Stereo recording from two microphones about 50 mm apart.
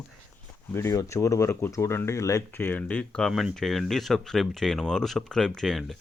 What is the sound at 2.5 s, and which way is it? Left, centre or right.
Speech, left.